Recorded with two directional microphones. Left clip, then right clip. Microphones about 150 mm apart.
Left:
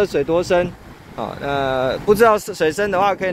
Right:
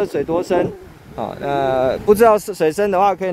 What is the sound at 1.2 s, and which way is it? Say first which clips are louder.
Speech: right 2 dB; 40° right (ahead or behind).